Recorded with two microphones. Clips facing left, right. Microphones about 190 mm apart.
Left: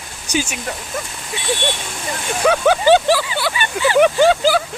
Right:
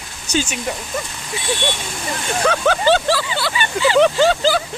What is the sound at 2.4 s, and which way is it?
Speech, 10° left (ahead or behind).